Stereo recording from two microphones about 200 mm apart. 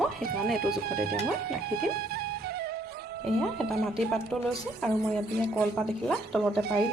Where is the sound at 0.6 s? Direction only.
50° right (ahead or behind).